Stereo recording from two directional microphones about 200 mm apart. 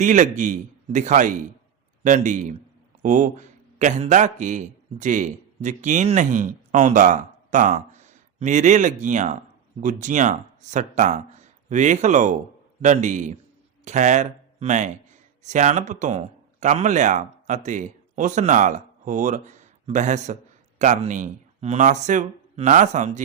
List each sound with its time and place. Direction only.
0.0 s a man's voice: 40° right (ahead or behind)